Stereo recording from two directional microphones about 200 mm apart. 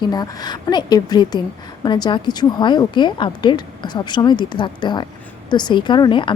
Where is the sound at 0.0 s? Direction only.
20° left (ahead or behind).